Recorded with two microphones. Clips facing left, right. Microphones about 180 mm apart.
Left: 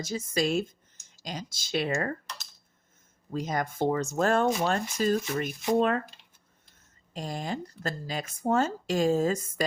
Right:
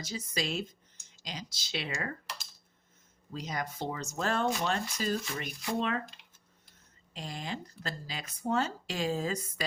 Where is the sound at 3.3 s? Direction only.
50° left (ahead or behind).